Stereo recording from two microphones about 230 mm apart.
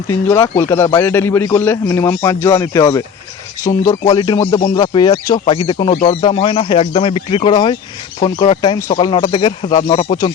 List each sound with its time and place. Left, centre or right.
0.3 s a man's voice: centre
4.1 s speech: centre